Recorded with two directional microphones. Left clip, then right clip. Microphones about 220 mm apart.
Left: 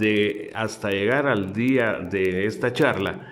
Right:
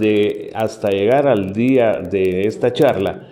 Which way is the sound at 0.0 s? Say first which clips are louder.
Right 6 dB; centre (ahead or behind).